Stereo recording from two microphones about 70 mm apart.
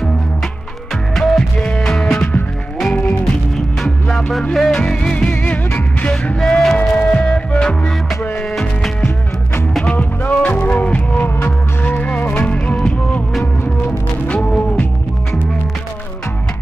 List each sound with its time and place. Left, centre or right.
1.1 s music: centre
4.5 s music: centre
6.4 s a sound: centre
7.0 s music: centre
10.3 s music: centre
14.2 s music: centre